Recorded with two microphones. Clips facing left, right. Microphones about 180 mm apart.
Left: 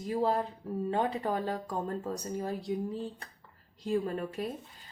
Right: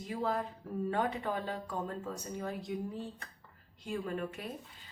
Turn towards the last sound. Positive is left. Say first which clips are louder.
# left 5 dB
turn(degrees=35)  # may be behind; listen again after turning